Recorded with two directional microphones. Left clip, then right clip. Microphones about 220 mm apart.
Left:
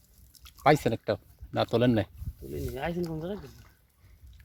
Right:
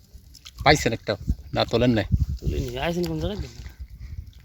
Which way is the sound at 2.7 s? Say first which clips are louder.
Right 7 dB; 50° right (ahead or behind).